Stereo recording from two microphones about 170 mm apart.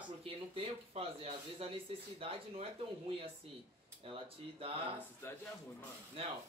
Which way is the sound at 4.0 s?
35° right (ahead or behind).